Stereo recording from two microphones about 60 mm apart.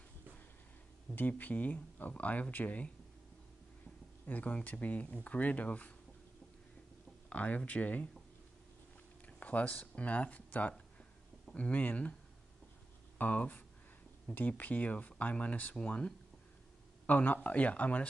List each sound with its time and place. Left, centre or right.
1.1 s speech: left
4.3 s speech: left
7.2 s speech: left
9.2 s speech: left
13.2 s speech: left
17.0 s speech: left